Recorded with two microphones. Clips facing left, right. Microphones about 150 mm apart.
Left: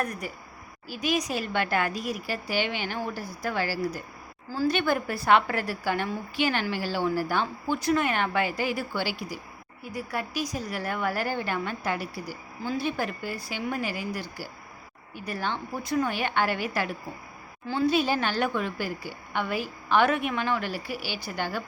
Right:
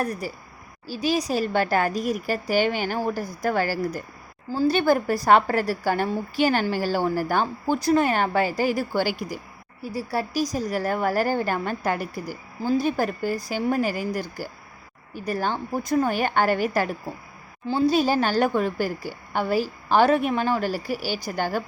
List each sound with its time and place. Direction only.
0.0 s a woman's voice: 35° right (ahead or behind)
4.5 s a woman's voice: 35° right (ahead or behind)
9.8 s a woman's voice: 35° right (ahead or behind)